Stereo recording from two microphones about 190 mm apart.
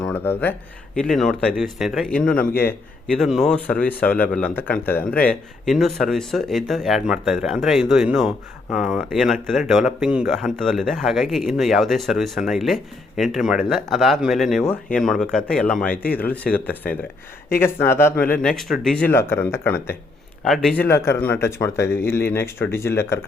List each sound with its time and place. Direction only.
0.0 s a sound: 10° left (ahead or behind)
0.9 s speech: centre (ahead or behind)
2.4 s speech: 50° left (ahead or behind)
2.6 s a man's voice: centre (ahead or behind)
20.8 s a man's voice: 15° left (ahead or behind)